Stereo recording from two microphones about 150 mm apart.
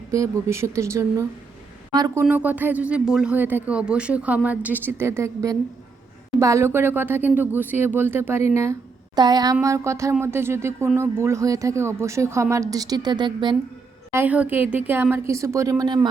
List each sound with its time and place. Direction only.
0.1 s a woman's voice: 20° right (ahead or behind)
2.2 s speech: 10° right (ahead or behind); by 13.6 s 30° right (ahead or behind)
14.1 s speech: 15° right (ahead or behind)